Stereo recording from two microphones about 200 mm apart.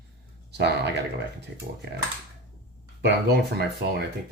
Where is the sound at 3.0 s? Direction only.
60° right (ahead or behind).